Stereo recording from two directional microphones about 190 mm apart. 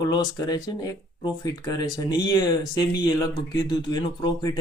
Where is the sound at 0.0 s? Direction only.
20° left (ahead or behind).